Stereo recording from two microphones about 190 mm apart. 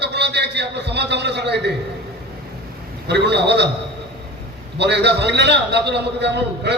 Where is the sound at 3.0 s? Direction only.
60° right (ahead or behind).